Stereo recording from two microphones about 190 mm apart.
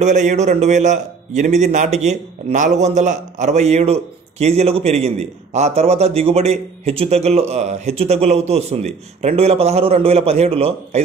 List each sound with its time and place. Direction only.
0.0 s a man's voice: 40° right (ahead or behind)